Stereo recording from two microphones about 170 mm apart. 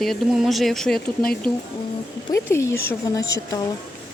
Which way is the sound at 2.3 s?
15° left (ahead or behind).